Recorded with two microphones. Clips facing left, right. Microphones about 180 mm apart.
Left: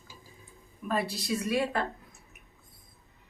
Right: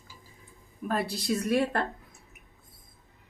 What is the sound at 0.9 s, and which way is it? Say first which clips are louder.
Speech: right 1 dB; 55° right (ahead or behind).